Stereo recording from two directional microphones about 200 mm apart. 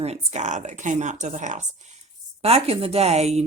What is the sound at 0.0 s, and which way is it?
Speech, 30° right (ahead or behind).